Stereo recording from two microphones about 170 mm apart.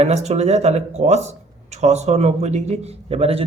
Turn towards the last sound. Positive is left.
turn(degrees=-35)  # may be behind; listen again after turning